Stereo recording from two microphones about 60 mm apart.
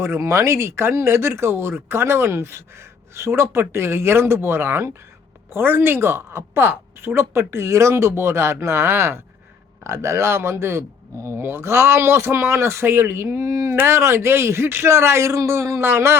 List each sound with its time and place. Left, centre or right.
0.0 s speech: right
15.8 s speech: right